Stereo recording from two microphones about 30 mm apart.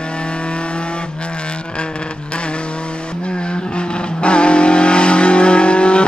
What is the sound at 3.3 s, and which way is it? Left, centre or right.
Vehicle, left.